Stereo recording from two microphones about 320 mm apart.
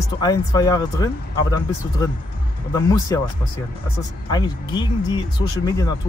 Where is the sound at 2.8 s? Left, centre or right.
Centre.